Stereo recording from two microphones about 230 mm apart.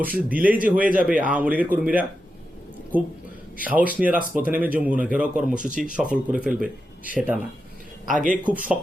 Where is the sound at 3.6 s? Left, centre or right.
Centre.